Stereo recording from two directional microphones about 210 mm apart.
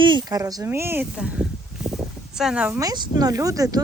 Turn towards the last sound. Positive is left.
turn(degrees=-15)  # may be behind; listen again after turning